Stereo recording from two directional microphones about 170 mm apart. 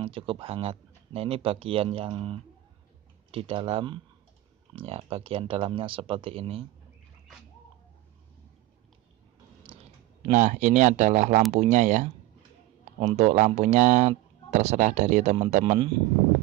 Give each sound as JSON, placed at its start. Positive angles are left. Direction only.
{"t": 0.0, "sound": "speech", "side_deg": -30}
{"t": 10.3, "sound": "speech", "side_deg": -45}